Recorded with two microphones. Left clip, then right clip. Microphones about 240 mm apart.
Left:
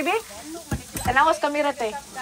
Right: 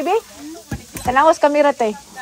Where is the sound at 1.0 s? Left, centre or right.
Right.